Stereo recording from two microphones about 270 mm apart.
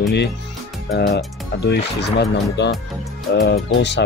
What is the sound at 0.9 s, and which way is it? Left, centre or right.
Speech, left.